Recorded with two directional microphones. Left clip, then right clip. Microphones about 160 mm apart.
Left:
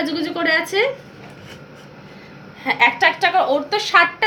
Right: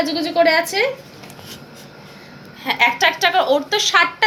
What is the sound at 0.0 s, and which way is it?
Speech, 25° left (ahead or behind).